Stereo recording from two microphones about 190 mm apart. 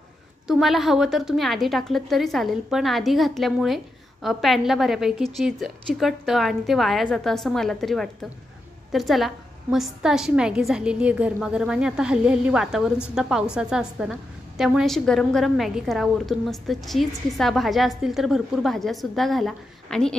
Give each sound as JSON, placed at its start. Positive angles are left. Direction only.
{"t": 0.5, "sound": "a woman's voice", "side_deg": 0}